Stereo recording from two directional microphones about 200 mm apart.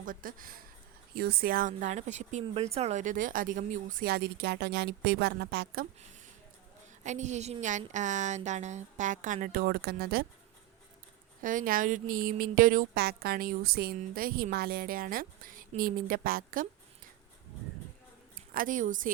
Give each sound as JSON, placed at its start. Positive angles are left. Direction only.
{"t": 0.0, "sound": "a woman's voice", "side_deg": -45}
{"t": 7.0, "sound": "a woman's voice", "side_deg": -35}
{"t": 11.4, "sound": "a woman's voice", "side_deg": -45}
{"t": 18.5, "sound": "a woman's voice", "side_deg": -40}